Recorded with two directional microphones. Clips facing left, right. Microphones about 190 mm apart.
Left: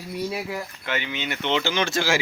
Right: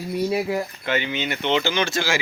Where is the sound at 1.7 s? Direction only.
Centre (ahead or behind).